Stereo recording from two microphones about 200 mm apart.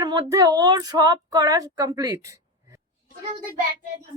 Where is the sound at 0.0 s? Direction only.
20° right (ahead or behind).